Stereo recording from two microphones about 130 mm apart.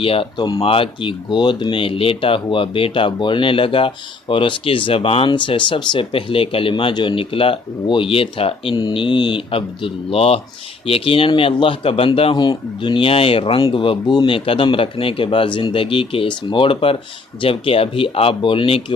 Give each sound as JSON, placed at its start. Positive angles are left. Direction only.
{"t": 0.0, "sound": "speech", "side_deg": 45}